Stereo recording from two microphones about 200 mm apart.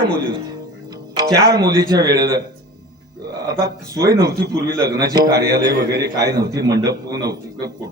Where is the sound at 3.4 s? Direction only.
15° right (ahead or behind).